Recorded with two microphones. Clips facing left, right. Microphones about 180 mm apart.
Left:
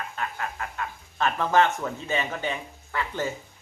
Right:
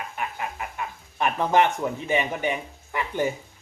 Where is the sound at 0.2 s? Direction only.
15° right (ahead or behind).